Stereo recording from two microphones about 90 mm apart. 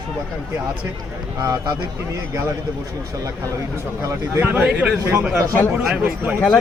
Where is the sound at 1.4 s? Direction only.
45° right (ahead or behind).